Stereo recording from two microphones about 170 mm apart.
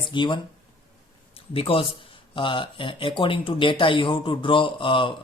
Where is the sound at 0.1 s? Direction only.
30° left (ahead or behind).